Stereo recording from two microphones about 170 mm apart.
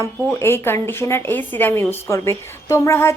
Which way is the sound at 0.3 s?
15° left (ahead or behind).